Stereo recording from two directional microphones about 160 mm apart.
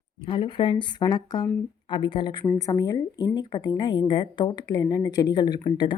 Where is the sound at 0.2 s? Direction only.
30° left (ahead or behind).